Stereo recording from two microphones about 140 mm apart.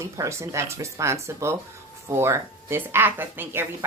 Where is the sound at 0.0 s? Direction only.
20° right (ahead or behind).